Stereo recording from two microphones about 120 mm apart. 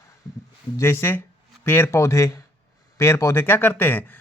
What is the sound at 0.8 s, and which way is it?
Speech, 20° left (ahead or behind).